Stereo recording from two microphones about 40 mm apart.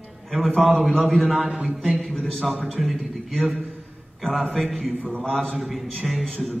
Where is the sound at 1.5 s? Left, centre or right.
Right.